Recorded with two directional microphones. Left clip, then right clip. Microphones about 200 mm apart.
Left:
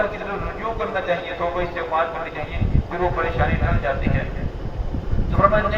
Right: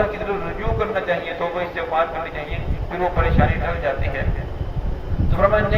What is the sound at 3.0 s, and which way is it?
Speech, 50° right (ahead or behind).